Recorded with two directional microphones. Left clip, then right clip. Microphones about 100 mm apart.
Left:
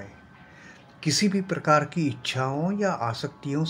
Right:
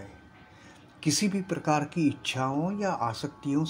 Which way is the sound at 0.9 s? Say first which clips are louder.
Left 3 dB; 50° right (ahead or behind).